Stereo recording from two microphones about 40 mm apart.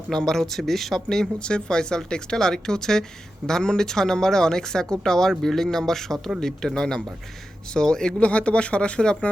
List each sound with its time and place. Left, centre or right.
0.3 s speech: centre
1.4 s speech: left
8.2 s speech: left